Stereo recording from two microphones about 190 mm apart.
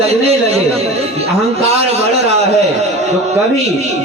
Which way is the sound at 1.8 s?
35° right (ahead or behind).